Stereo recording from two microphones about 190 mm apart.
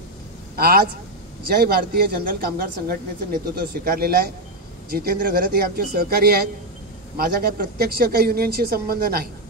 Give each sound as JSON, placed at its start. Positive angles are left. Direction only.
{"t": 0.6, "sound": "a man's voice", "side_deg": -55}